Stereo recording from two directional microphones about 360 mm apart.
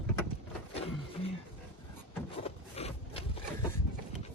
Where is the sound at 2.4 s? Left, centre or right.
Centre.